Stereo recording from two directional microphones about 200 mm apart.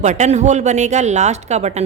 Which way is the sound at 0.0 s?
35° right (ahead or behind).